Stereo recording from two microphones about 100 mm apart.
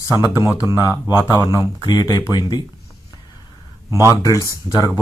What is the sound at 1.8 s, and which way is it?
Speech, 40° left (ahead or behind).